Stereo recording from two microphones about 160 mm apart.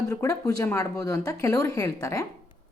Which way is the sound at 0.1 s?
20° left (ahead or behind).